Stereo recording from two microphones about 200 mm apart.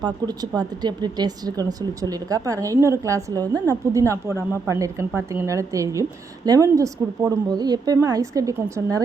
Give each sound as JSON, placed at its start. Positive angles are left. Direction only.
{"t": 0.0, "sound": "a woman's voice", "side_deg": -20}